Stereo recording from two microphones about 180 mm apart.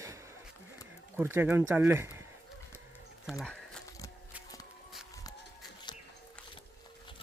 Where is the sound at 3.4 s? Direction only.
5° left (ahead or behind).